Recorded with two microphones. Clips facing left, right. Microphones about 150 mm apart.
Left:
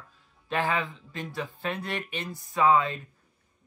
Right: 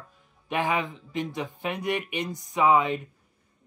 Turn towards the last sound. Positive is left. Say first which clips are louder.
# right 1 dB
turn(degrees=-15)  # may be behind; listen again after turning